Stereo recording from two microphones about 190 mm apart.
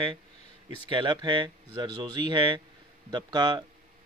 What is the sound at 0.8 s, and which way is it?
Speech, 25° right (ahead or behind).